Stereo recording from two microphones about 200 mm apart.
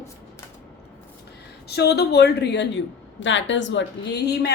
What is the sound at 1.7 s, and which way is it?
Speech, 55° left (ahead or behind).